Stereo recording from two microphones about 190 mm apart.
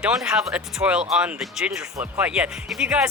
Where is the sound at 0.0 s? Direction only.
5° right (ahead or behind).